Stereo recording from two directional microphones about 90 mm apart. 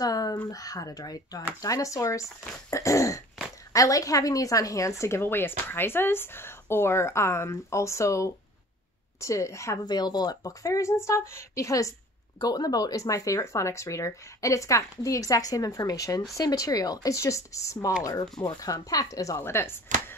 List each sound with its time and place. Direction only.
0.0 s a sound: 45° left (ahead or behind)
0.5 s a woman's voice: 45° left (ahead or behind)
9.8 s a woman's voice: 50° left (ahead or behind); by 20.2 s 25° left (ahead or behind)